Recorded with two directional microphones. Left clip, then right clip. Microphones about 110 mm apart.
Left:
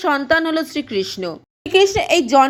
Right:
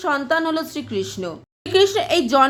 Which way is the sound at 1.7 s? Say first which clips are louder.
Left 2 dB; 25° left (ahead or behind).